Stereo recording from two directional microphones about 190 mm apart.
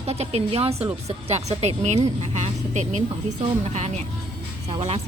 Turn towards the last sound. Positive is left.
turn(degrees=-35)  # may be behind; listen again after turning